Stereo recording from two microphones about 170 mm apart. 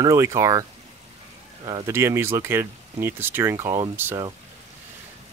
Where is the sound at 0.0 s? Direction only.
15° right (ahead or behind).